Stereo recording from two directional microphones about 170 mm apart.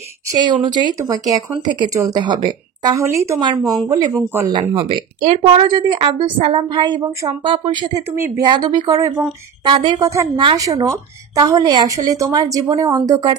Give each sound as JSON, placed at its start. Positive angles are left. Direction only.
{"t": 0.3, "sound": "a woman's voice", "side_deg": -25}
{"t": 10.0, "sound": "a woman's voice", "side_deg": -20}